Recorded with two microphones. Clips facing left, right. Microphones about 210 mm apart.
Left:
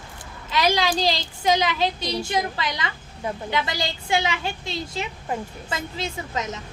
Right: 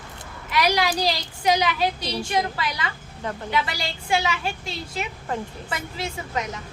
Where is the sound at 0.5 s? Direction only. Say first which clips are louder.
Even; 25° left (ahead or behind).